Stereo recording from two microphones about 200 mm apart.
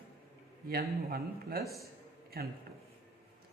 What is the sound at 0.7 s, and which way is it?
Speech, 50° right (ahead or behind).